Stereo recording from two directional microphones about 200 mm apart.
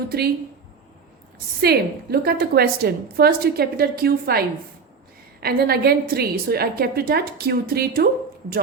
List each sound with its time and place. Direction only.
1.6 s a woman's voice: 50° right (ahead or behind)